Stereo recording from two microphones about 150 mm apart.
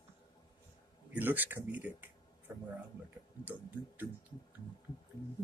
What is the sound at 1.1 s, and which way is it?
Speech, 10° right (ahead or behind).